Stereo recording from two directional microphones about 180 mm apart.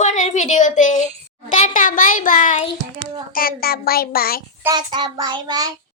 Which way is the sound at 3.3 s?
55° left (ahead or behind).